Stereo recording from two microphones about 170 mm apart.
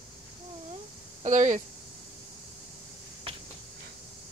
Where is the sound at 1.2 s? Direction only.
45° right (ahead or behind).